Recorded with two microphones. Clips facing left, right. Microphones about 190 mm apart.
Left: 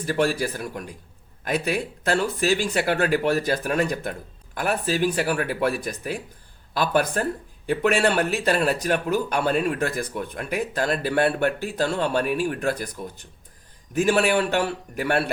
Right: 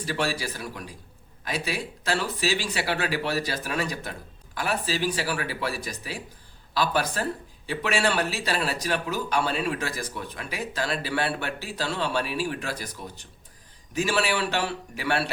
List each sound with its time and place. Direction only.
0.0 s a man's voice: 50° left (ahead or behind)